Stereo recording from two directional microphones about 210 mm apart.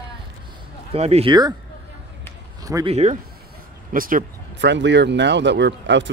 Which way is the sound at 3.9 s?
45° right (ahead or behind).